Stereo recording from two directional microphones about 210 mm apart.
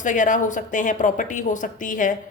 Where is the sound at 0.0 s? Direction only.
35° left (ahead or behind).